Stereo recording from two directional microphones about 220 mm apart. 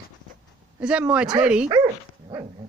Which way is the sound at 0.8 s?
5° right (ahead or behind).